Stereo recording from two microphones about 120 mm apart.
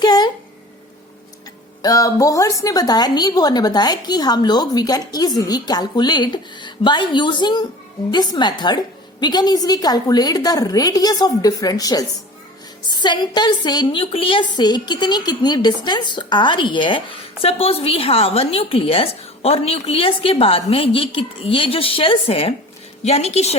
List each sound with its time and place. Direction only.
0.0 s a sound: 35° left (ahead or behind)
1.8 s a woman's voice: 30° left (ahead or behind); by 22.5 s 50° left (ahead or behind)
23.0 s a woman's voice: 60° left (ahead or behind)